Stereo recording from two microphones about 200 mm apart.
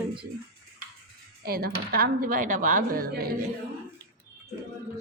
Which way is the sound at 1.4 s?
50° right (ahead or behind).